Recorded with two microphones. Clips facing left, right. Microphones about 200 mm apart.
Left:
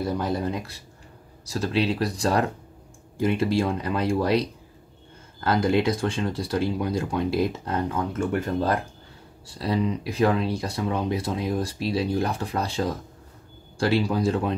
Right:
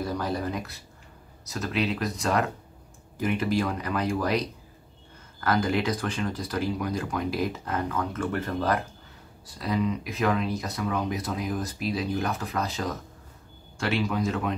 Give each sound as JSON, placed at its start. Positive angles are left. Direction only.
{"t": 0.0, "sound": "speech", "side_deg": 25}